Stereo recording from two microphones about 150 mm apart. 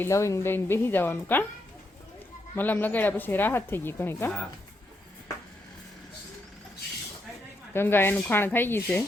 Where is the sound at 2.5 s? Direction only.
10° left (ahead or behind).